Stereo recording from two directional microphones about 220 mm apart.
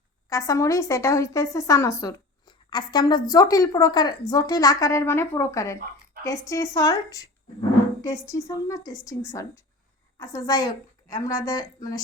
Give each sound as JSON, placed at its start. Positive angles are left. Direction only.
{"t": 0.3, "sound": "a woman's voice", "side_deg": 15}